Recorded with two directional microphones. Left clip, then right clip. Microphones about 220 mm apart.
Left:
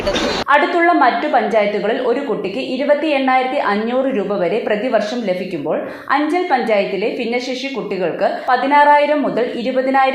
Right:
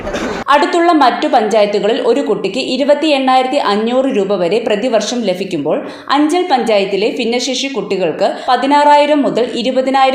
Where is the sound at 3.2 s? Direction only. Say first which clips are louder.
Right 4 dB; 45° right (ahead or behind).